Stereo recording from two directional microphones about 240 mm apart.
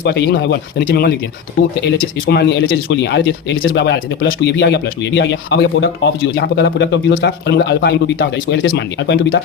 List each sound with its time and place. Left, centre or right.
0.0 s speech: left